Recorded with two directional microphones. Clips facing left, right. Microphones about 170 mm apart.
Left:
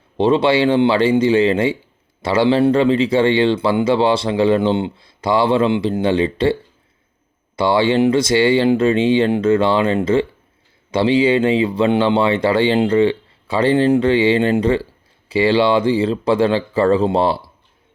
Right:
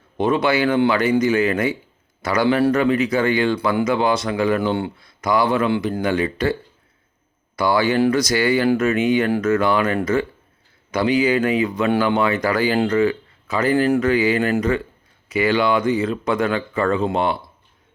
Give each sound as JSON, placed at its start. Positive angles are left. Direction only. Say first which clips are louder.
{"t": 0.2, "sound": "speech", "louder": "left 4 dB", "side_deg": 30}